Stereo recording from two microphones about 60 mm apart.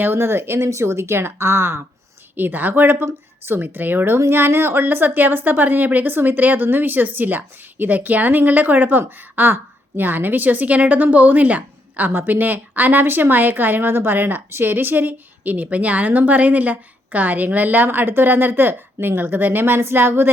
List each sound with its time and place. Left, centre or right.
0.0 s a woman's voice: right
0.6 s speech: right
2.3 s a woman's voice: right